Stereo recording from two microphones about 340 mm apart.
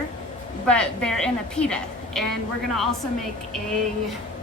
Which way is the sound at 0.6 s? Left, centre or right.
Centre.